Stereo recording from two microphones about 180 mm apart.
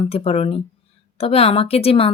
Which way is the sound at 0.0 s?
30° left (ahead or behind).